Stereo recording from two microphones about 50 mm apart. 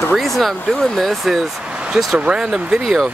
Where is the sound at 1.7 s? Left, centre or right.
Centre.